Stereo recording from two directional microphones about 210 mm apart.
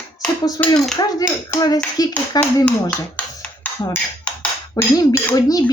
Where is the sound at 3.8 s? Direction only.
10° left (ahead or behind).